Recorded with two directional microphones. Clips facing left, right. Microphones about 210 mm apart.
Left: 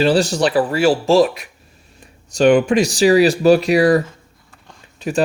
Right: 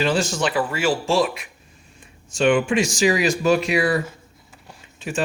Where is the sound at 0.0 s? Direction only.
35° left (ahead or behind).